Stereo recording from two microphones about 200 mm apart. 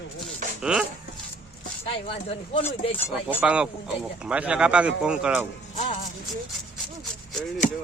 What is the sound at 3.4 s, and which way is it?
Speech, 5° right (ahead or behind).